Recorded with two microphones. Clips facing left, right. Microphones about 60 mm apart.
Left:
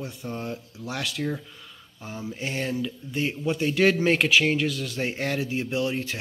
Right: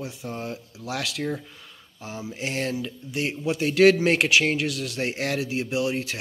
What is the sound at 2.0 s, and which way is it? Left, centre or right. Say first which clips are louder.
Speech: right 1 dB; centre.